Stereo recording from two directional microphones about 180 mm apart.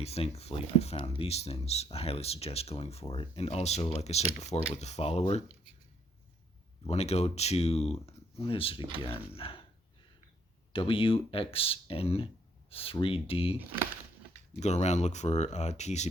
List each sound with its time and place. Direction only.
0.0 s speech: 35° left (ahead or behind)
6.8 s speech: 35° left (ahead or behind)
10.7 s speech: 30° left (ahead or behind)
14.6 s speech: 40° left (ahead or behind)